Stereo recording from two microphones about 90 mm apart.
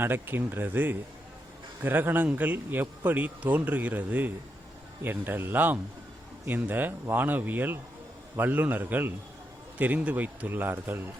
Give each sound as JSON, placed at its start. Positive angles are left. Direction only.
{"t": 0.0, "sound": "speech", "side_deg": -25}